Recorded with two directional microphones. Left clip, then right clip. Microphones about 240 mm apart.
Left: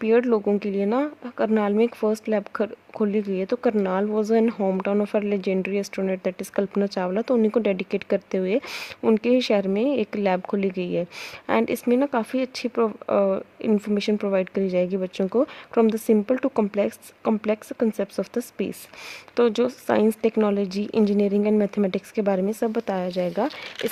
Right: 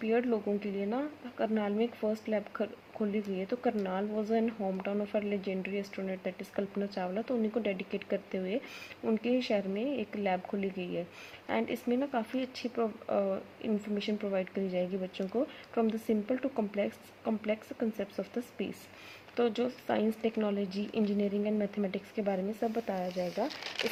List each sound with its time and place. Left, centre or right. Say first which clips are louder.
0.0 s speech: left 11 dB; left